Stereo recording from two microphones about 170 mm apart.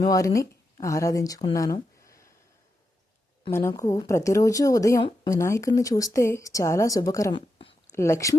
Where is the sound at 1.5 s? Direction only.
20° left (ahead or behind).